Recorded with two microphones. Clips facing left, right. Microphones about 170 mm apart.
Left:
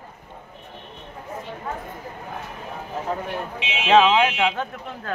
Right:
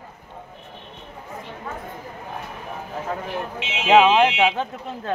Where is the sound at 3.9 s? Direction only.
20° right (ahead or behind).